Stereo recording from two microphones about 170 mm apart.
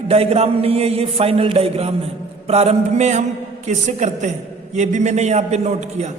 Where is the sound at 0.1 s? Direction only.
35° right (ahead or behind).